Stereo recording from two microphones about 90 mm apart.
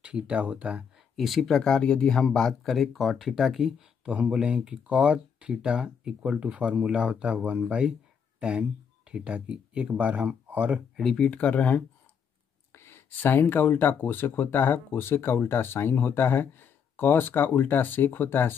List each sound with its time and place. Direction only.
0.0 s speech: 15° right (ahead or behind)
1.1 s speech: centre (ahead or behind); by 10.8 s 20° right (ahead or behind)
11.0 s speech: 5° left (ahead or behind)
12.7 s speech: 25° left (ahead or behind)